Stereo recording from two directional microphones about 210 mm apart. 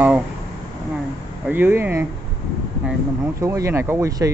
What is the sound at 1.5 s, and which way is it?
Speech, 10° right (ahead or behind).